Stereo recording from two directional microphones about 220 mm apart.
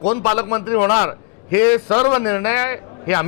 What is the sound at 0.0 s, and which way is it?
A man's voice, 20° left (ahead or behind).